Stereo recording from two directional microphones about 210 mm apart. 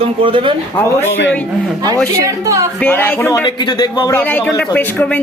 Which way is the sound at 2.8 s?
10° left (ahead or behind).